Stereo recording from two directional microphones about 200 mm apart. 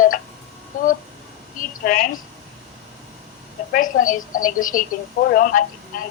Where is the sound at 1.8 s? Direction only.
45° left (ahead or behind).